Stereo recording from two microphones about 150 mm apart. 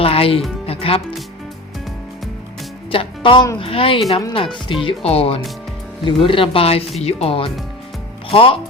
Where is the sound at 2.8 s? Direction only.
35° left (ahead or behind).